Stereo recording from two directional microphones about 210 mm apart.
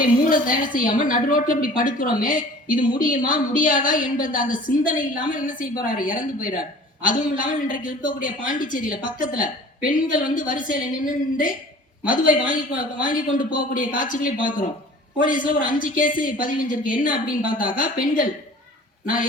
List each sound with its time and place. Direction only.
0.0 s a woman's voice: 40° left (ahead or behind)